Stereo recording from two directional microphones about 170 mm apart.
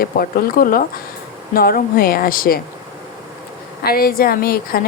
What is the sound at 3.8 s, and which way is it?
Speech, 60° left (ahead or behind).